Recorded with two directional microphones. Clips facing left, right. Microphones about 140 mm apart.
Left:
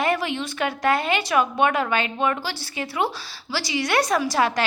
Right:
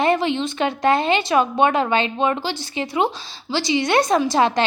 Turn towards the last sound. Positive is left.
turn(degrees=-25)  # may be behind; listen again after turning